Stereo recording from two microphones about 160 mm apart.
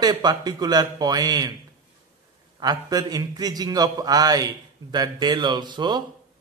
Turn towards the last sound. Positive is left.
turn(degrees=-25)  # may be behind; listen again after turning